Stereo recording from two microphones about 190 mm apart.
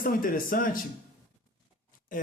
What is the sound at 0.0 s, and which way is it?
Speech, 50° left (ahead or behind).